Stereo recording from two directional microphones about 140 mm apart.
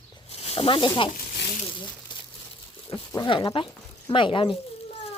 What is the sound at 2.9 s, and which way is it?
Speech, 40° left (ahead or behind).